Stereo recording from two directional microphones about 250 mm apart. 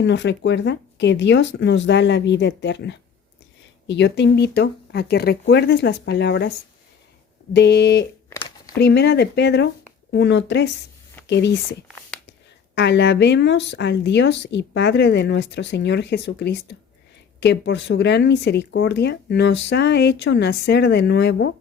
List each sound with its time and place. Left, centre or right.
0.0 s speech: left
7.5 s speech: left
8.3 s a sound: centre
8.8 s speech: left